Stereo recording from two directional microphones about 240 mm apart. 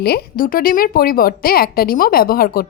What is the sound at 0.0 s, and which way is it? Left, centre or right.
A woman's voice, left.